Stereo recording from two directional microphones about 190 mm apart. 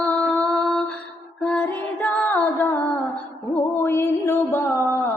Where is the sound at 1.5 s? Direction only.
5° left (ahead or behind).